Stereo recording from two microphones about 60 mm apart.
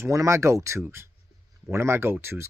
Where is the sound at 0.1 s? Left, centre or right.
Right.